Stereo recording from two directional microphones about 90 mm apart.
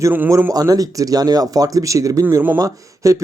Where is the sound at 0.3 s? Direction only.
35° right (ahead or behind).